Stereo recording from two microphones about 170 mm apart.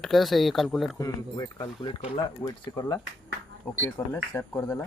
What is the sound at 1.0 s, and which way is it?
Speech, 20° left (ahead or behind).